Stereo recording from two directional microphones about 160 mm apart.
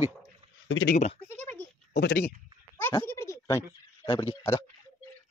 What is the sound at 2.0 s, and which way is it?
Speech, 90° left.